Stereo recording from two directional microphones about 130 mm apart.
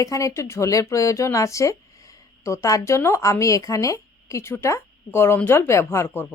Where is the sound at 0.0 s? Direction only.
25° left (ahead or behind).